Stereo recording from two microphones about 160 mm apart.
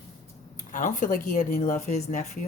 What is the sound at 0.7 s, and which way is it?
Speech, 55° left (ahead or behind).